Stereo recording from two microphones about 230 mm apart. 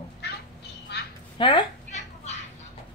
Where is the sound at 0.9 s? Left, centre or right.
Left.